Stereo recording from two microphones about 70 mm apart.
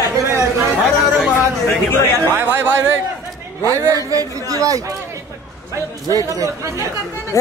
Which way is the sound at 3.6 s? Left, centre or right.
Right.